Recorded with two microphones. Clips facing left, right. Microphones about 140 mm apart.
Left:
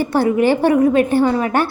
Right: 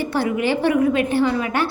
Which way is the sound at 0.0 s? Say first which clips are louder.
Left 6 dB; 45° left (ahead or behind).